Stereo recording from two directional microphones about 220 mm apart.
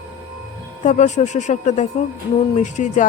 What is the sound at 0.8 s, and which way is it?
Speech, 35° left (ahead or behind).